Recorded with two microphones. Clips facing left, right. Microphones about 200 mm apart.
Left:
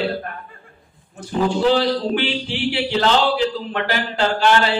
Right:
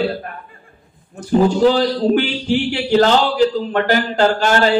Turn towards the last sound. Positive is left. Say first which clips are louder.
# right 3 dB
turn(degrees=-45)  # may be behind; listen again after turning